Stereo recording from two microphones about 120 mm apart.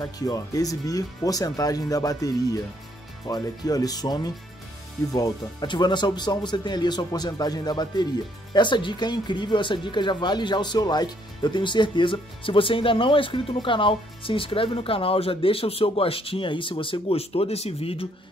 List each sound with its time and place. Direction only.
0.0 s speech: 30° left (ahead or behind); by 18.0 s 55° left (ahead or behind)